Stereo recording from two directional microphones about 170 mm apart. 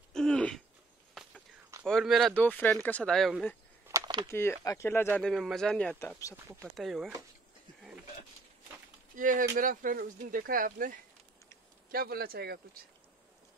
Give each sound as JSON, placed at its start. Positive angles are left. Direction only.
{"t": 0.1, "sound": "throat clearing", "side_deg": 5}
{"t": 1.9, "sound": "speech", "side_deg": 0}
{"t": 3.9, "sound": "a sound", "side_deg": -25}
{"t": 4.3, "sound": "speech", "side_deg": 15}
{"t": 5.3, "sound": "speech", "side_deg": 0}
{"t": 5.9, "sound": "speech", "side_deg": 20}
{"t": 6.6, "sound": "speech", "side_deg": 0}
{"t": 9.1, "sound": "speech", "side_deg": -50}